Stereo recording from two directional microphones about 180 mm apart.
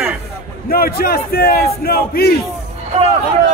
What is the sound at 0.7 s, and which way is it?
A man's voice, 55° left (ahead or behind).